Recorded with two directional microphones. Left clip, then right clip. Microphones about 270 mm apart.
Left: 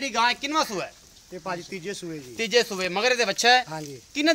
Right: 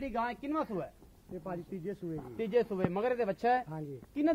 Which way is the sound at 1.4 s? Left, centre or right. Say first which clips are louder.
Left 9 dB; centre.